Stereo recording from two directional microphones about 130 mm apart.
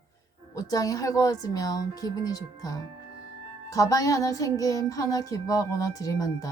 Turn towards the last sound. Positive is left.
turn(degrees=25)  # may be behind; listen again after turning